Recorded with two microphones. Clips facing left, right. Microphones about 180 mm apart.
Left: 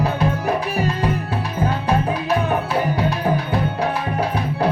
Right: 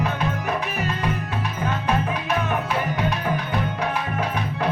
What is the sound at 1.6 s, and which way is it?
Music, 35° left (ahead or behind).